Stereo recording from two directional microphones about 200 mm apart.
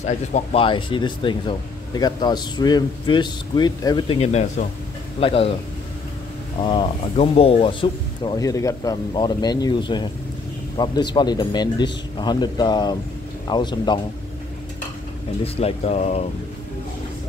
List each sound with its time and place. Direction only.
0.0 s speech: 35° left (ahead or behind)
6.6 s speech: 25° left (ahead or behind)
15.4 s speech: 30° left (ahead or behind)